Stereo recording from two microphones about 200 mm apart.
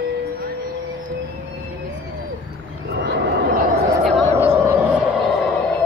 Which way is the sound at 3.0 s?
55° right (ahead or behind).